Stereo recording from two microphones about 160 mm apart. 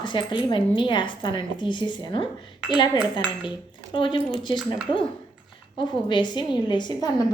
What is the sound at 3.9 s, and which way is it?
Coin, 30° left (ahead or behind).